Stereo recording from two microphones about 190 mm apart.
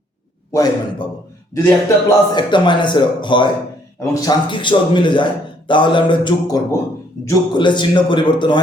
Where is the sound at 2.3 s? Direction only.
25° left (ahead or behind).